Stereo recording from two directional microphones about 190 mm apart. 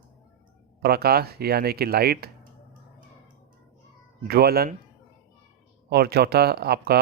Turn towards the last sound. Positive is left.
turn(degrees=-55)  # may be behind; listen again after turning